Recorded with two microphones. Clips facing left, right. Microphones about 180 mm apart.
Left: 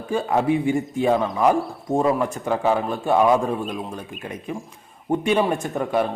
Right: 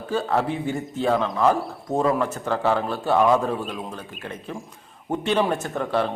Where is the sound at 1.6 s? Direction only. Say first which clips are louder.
Left 2 dB; centre (ahead or behind).